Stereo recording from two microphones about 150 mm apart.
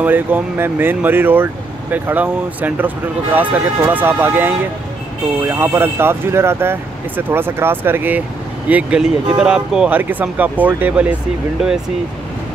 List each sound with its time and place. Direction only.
0.0 s speech: 10° right (ahead or behind)